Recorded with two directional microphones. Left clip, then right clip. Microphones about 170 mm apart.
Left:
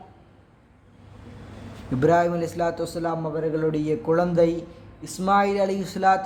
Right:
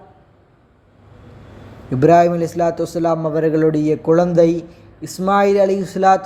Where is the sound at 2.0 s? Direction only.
20° right (ahead or behind).